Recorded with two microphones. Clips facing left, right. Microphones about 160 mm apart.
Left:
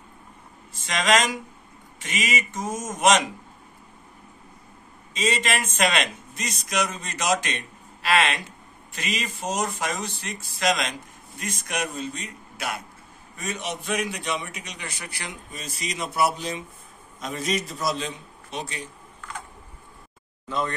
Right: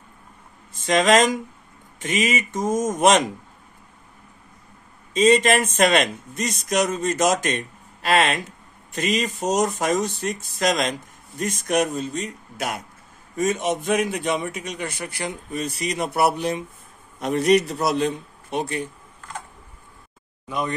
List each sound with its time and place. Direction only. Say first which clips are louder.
0.7 s speech: right 6 dB; 45° right (ahead or behind)
5.1 s a man's voice: right 9 dB; 45° right (ahead or behind)
20.4 s speech: right 1 dB; 15° right (ahead or behind)